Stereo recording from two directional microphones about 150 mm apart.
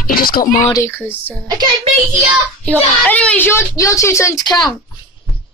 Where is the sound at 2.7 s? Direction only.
10° left (ahead or behind); by 4.6 s 25° left (ahead or behind).